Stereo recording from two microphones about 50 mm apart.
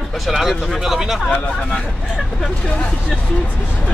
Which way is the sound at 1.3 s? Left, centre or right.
Left.